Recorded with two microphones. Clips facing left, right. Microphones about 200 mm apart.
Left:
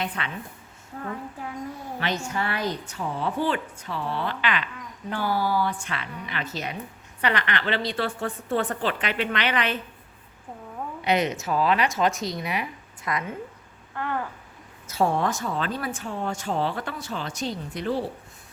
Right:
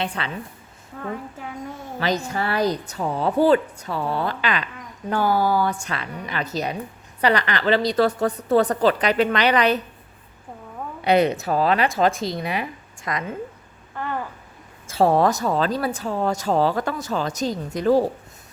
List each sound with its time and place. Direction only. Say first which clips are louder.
0.0 s a woman's voice: right 3 dB; 30° right (ahead or behind)
2.0 s a woman's voice: right 5 dB; 35° right (ahead or behind)
11.0 s a woman's voice: right 6 dB; 35° right (ahead or behind)
14.8 s a woman's voice: right 6 dB; 30° right (ahead or behind)